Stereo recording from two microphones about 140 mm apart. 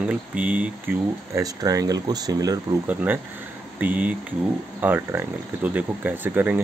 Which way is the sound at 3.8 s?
10° right (ahead or behind).